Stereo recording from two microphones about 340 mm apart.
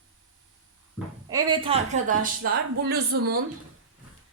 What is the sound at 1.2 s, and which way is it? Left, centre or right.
Speech, centre.